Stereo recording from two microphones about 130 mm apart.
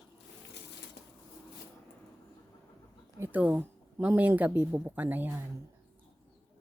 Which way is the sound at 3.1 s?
15° right (ahead or behind).